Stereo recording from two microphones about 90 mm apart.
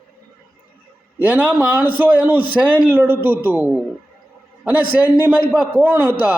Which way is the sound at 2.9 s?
20° right (ahead or behind).